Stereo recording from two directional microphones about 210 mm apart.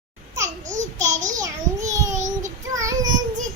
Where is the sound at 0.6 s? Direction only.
35° right (ahead or behind).